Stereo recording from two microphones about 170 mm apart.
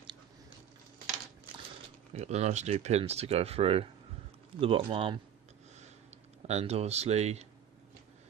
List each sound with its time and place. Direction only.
2.1 s speech: 40° right (ahead or behind)
6.5 s speech: 40° right (ahead or behind)